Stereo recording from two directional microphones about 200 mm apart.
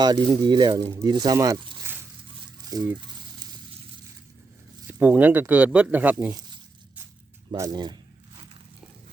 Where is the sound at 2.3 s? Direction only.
20° right (ahead or behind).